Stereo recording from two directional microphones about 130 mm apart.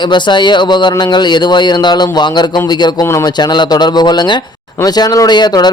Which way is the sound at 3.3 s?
35° left (ahead or behind).